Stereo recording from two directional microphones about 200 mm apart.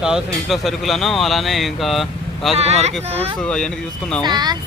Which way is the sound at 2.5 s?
30° right (ahead or behind).